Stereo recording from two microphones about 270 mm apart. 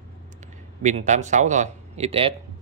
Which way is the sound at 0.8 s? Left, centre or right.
Right.